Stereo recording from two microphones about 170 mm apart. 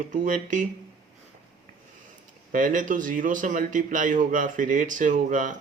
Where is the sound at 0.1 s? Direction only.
50° right (ahead or behind).